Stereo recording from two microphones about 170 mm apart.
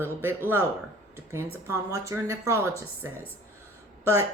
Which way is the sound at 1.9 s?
20° right (ahead or behind).